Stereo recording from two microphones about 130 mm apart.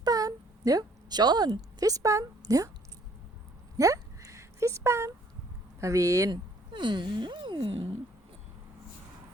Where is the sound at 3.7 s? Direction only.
25° right (ahead or behind).